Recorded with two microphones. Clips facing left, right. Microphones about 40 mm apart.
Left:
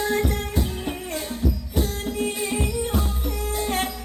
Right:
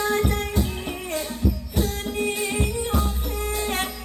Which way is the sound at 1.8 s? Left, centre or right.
Right.